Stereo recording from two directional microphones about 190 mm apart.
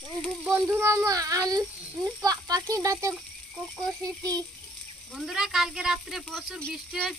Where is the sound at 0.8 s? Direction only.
15° right (ahead or behind).